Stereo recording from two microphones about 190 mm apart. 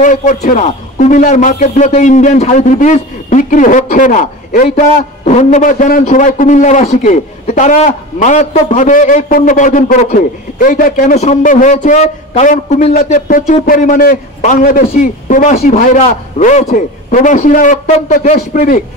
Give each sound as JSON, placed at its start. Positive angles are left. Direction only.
{"t": 0.0, "sound": "a man's voice", "side_deg": 40}